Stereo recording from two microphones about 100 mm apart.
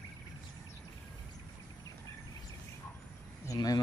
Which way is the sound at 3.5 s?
40° left (ahead or behind).